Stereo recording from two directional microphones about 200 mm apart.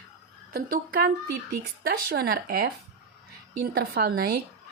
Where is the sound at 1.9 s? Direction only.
45° right (ahead or behind).